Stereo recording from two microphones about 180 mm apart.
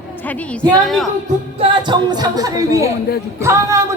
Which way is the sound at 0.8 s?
Centre (ahead or behind).